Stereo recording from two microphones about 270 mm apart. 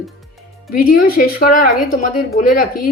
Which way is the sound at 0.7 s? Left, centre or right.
Left.